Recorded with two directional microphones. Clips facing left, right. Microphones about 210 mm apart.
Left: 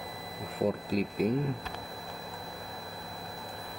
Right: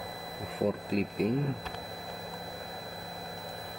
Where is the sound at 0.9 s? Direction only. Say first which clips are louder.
Even; centre (ahead or behind).